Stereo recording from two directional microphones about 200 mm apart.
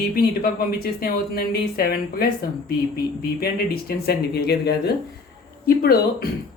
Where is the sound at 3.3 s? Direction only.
50° left (ahead or behind).